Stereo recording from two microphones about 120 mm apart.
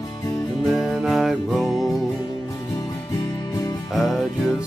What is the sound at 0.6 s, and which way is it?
Music, centre (ahead or behind).